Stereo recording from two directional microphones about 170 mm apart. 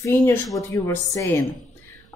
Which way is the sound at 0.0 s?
15° left (ahead or behind).